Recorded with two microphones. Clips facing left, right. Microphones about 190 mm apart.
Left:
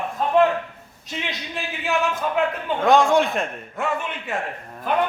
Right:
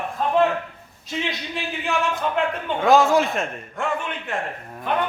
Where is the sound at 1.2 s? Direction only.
Centre (ahead or behind).